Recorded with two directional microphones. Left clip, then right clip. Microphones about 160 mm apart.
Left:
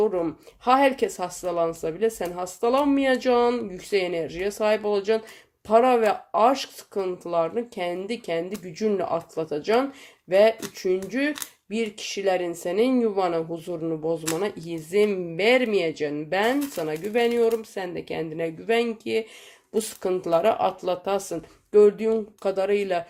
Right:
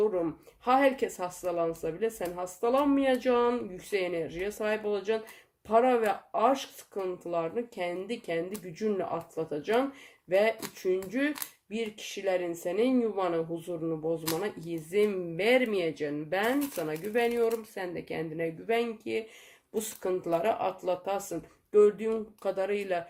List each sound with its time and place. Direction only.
0.0 s speech: 35° left (ahead or behind)